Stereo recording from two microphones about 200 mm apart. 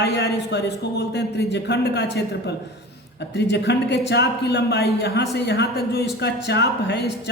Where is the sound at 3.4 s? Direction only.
60° left (ahead or behind).